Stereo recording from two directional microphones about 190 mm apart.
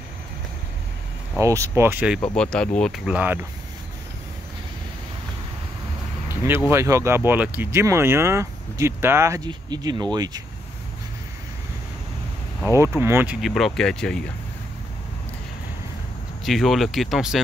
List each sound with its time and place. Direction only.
1.4 s speech: 15° right (ahead or behind)
2.3 s speech: 5° left (ahead or behind)
3.1 s speech: 10° right (ahead or behind)
6.2 s a sound: 10° right (ahead or behind)
6.7 s speech: 15° right (ahead or behind)
12.7 s speech: 15° right (ahead or behind); by 14.2 s 5° left (ahead or behind)
16.4 s speech: centre (ahead or behind)